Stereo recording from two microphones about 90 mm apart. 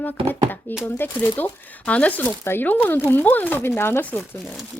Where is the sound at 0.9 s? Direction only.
20° left (ahead or behind).